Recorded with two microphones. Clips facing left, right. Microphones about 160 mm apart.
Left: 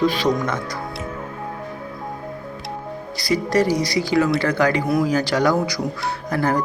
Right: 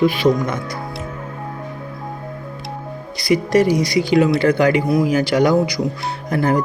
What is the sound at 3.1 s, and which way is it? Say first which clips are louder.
Speech: right 4 dB; 15° right (ahead or behind).